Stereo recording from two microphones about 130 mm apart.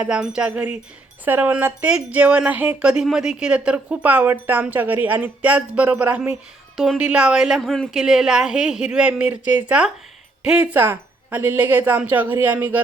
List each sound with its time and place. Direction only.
0.0 s speech: 5° right (ahead or behind)